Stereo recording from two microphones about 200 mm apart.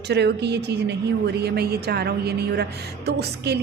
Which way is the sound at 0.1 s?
55° right (ahead or behind).